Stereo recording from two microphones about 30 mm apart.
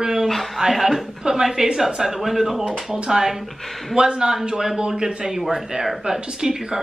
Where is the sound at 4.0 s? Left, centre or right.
Right.